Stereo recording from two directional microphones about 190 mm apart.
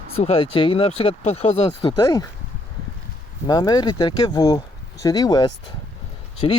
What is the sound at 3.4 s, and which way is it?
Speech, 20° left (ahead or behind).